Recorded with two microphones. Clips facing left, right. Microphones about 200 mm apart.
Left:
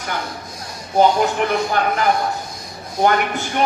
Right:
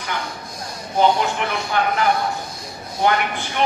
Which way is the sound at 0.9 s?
45° left (ahead or behind).